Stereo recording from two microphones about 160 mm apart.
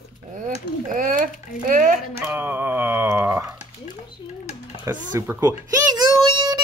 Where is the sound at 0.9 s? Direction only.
60° right (ahead or behind).